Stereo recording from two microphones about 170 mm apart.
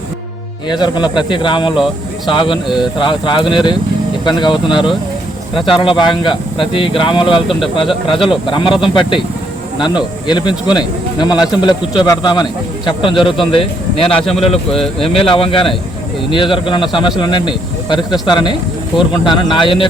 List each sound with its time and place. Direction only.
0.7 s speech: 25° left (ahead or behind)